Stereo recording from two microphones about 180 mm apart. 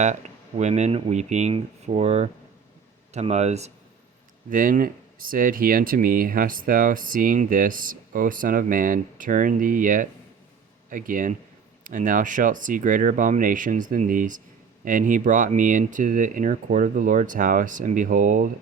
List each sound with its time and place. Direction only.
0.0 s speech: 40° right (ahead or behind)
4.4 s speech: 50° right (ahead or behind)